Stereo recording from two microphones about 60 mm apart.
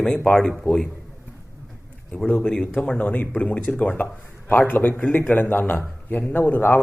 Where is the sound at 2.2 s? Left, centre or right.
Centre.